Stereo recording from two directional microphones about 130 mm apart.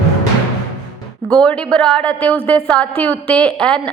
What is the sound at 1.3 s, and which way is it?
A woman's voice, 5° left (ahead or behind).